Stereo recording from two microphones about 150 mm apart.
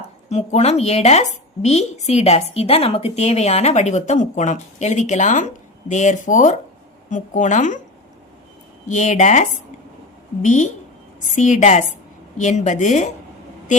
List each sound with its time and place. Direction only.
0.3 s a woman's voice: 45° left (ahead or behind)
8.9 s a woman's voice: 55° left (ahead or behind)